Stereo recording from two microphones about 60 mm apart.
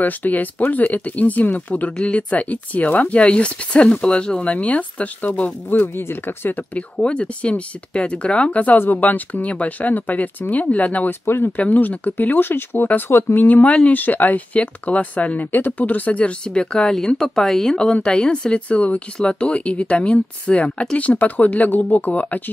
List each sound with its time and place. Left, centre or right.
0.0 s speech: left
5.7 s speech: left
7.0 s speech: centre
11.1 s speech: left
11.5 s speech: left